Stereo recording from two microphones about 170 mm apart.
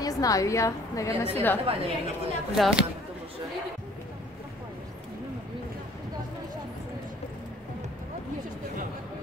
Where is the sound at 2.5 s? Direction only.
Centre (ahead or behind).